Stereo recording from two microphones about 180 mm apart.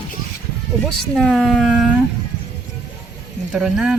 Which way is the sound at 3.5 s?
5° right (ahead or behind).